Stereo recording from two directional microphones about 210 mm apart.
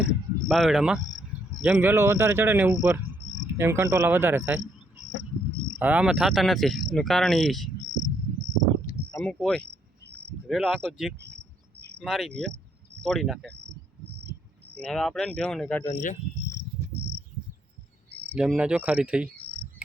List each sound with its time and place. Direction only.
0.0 s speech: centre (ahead or behind)
5.8 s speech: 5° right (ahead or behind)
9.1 s speech: 5° left (ahead or behind)
14.8 s speech: 5° left (ahead or behind)
15.9 s speech: 40° left (ahead or behind)
18.3 s speech: 5° right (ahead or behind)